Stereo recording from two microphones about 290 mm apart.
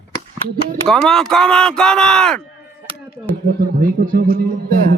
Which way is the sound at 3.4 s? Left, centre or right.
Right.